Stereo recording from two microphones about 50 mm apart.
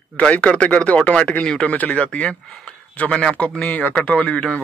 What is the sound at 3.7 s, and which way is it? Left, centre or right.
Speech, left.